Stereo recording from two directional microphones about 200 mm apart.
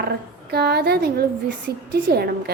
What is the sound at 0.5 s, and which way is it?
A woman's voice, 50° right (ahead or behind).